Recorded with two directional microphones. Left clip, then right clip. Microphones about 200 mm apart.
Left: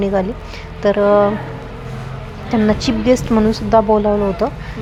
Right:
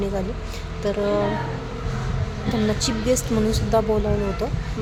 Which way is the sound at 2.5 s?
20° left (ahead or behind).